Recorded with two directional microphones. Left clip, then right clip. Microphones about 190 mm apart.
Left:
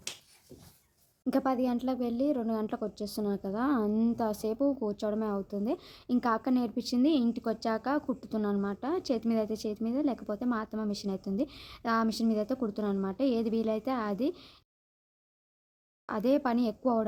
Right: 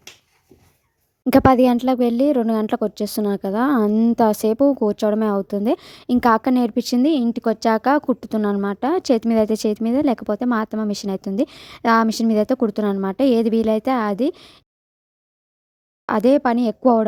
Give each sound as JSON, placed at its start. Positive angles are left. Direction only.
{"t": 1.2, "sound": "a woman's voice", "side_deg": -50}
{"t": 16.0, "sound": "speech", "side_deg": -45}